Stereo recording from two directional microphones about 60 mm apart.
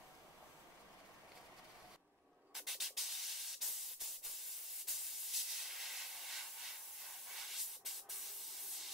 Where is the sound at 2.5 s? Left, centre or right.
Centre.